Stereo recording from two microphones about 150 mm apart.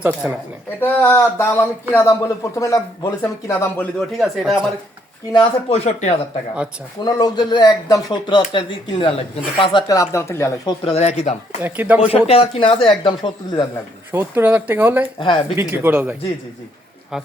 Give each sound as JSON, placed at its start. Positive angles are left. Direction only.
{"t": 0.0, "sound": "speech", "side_deg": -10}
{"t": 0.8, "sound": "speech", "side_deg": 10}
{"t": 4.2, "sound": "speech", "side_deg": 0}
{"t": 5.3, "sound": "speech", "side_deg": 35}
{"t": 7.0, "sound": "speech", "side_deg": 25}
{"t": 10.8, "sound": "speech", "side_deg": 45}
{"t": 11.6, "sound": "speech", "side_deg": -10}
{"t": 11.9, "sound": "speech", "side_deg": 40}
{"t": 14.1, "sound": "speech", "side_deg": -15}
{"t": 15.2, "sound": "speech", "side_deg": 35}
{"t": 15.5, "sound": "speech", "side_deg": -15}